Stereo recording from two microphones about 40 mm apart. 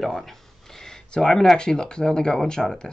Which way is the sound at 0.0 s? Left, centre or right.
Centre.